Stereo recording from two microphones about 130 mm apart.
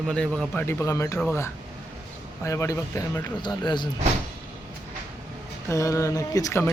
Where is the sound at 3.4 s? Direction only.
35° left (ahead or behind).